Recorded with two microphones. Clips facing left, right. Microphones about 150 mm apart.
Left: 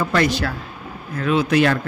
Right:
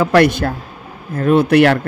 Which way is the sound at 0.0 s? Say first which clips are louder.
Right 7 dB; 70° right (ahead or behind).